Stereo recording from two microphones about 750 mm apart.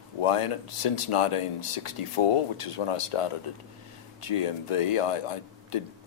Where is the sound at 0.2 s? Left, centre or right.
Left.